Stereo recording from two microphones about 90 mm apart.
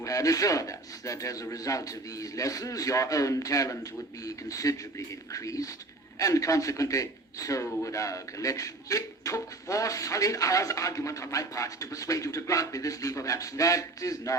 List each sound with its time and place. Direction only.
0.0 s a man's voice: 40° left (ahead or behind)